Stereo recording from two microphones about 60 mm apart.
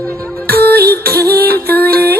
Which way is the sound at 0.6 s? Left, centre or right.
Left.